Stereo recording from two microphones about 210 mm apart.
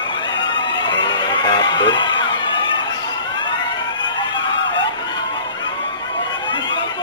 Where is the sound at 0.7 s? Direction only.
20° left (ahead or behind).